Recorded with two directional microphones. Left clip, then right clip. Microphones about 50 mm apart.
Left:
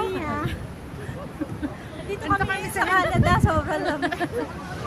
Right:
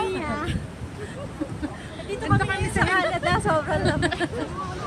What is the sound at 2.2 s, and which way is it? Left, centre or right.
Speech, left.